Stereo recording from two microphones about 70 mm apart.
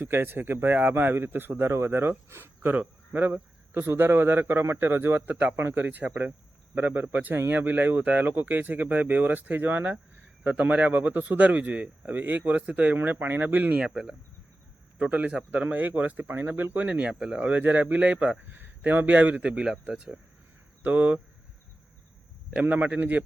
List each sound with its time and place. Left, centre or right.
0.0 s a man's voice: right; by 14.2 s centre
14.9 s a man's voice: right
16.9 s speech: centre
17.6 s a man's voice: right
22.6 s a man's voice: right